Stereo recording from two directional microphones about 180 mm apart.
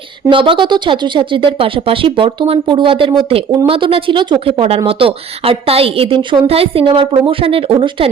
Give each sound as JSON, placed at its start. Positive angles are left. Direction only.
{"t": 0.3, "sound": "a woman's voice", "side_deg": -30}